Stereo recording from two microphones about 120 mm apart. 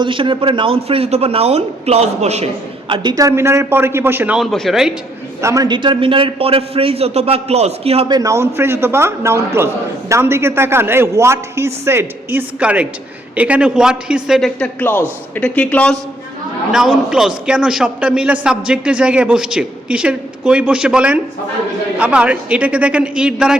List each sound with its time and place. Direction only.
0.0 s a man's voice: 45° right (ahead or behind); by 2.5 s 65° right (ahead or behind)
2.9 s a man's voice: 35° right (ahead or behind); by 4.4 s 20° right (ahead or behind)
4.4 s speech: centre (ahead or behind)
5.4 s a man's voice: 25° right (ahead or behind)
5.6 s a man's voice: 40° right (ahead or behind); by 8.0 s 60° right (ahead or behind)
8.0 s a man's voice: 30° right (ahead or behind); by 14.7 s centre (ahead or behind)
14.8 s speech: 15° left (ahead or behind)
16.7 s a man's voice: 5° right (ahead or behind)